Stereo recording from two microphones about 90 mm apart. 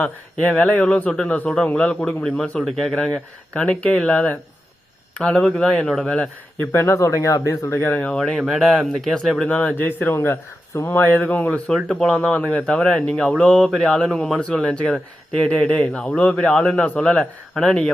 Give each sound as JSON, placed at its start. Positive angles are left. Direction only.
{"t": 0.0, "sound": "a man's voice", "side_deg": 10}
{"t": 6.7, "sound": "speech", "side_deg": 30}
{"t": 8.1, "sound": "speech", "side_deg": 5}
{"t": 9.5, "sound": "speech", "side_deg": 15}
{"t": 11.7, "sound": "a man's voice", "side_deg": 5}